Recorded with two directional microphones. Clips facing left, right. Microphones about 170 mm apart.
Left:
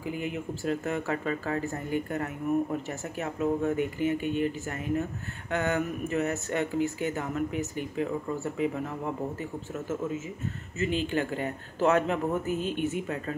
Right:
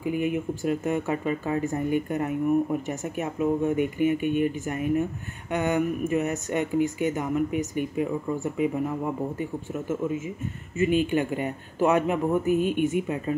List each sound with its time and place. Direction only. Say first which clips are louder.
0.0 s speech: right 7 dB; 20° right (ahead or behind)